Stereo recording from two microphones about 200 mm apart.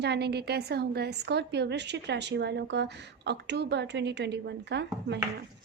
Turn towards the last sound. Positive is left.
turn(degrees=-60)  # may be behind; listen again after turning